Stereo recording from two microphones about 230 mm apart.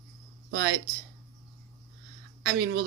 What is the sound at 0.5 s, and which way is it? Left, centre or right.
Speech, right.